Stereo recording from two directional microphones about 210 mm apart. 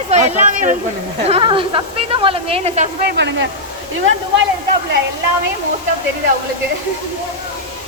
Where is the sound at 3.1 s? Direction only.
55° right (ahead or behind).